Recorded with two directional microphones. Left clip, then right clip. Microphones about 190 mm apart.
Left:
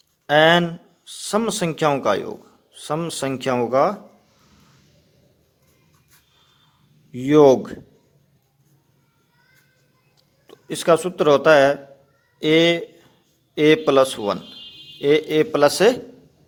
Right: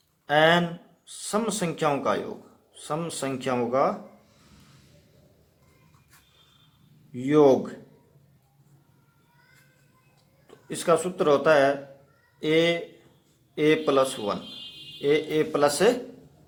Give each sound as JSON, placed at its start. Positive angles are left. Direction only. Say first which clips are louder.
{"t": 0.3, "sound": "a man's voice", "louder": "left 5 dB", "side_deg": 50}
{"t": 7.1, "sound": "a man's voice", "louder": "left 6 dB", "side_deg": 55}
{"t": 10.4, "sound": "a man's voice", "louder": "left 6 dB", "side_deg": 55}